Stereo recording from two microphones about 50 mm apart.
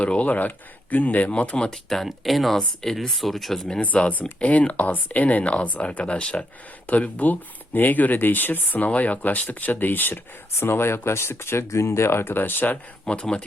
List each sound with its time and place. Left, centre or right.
0.0 s speech: left
1.3 s speech: left
1.7 s speech: centre
3.8 s speech: left
10.6 s speech: left
13.1 s speech: left